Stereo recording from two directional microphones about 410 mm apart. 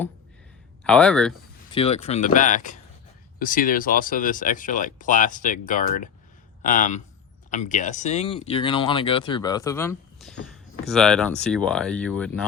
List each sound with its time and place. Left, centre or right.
0.9 s speech: centre
1.7 s speech: centre